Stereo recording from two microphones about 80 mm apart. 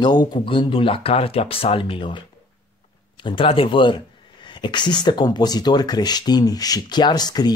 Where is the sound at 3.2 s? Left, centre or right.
Left.